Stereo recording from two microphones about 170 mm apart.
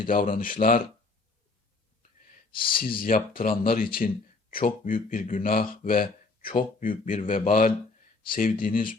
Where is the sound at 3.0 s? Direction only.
55° left (ahead or behind).